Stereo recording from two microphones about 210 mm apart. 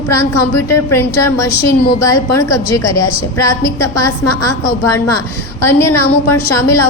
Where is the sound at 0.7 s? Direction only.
15° left (ahead or behind).